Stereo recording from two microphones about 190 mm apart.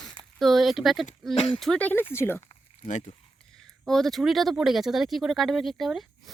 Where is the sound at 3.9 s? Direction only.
Centre (ahead or behind).